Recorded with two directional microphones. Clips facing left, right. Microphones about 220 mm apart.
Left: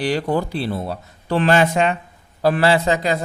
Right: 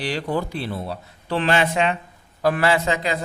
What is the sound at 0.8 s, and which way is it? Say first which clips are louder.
A man's voice: left 4 dB; 45° left (ahead or behind).